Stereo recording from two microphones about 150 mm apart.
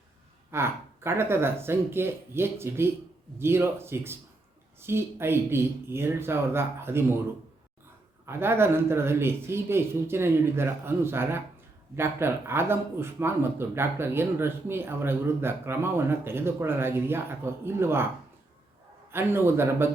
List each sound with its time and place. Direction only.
0.5 s speech: 15° right (ahead or behind)
8.3 s speech: 15° right (ahead or behind)
19.1 s speech: 15° right (ahead or behind)